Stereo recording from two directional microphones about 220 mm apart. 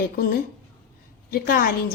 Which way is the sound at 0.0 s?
40° left (ahead or behind).